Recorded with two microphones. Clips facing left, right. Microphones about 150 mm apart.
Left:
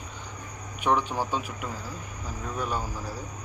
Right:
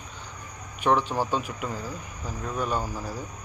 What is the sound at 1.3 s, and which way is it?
Speech, 5° left (ahead or behind).